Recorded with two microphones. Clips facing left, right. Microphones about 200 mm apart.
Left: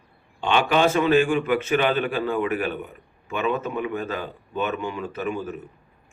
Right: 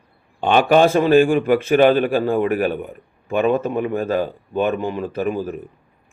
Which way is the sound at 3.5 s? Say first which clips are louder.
Right 6 dB; 40° right (ahead or behind).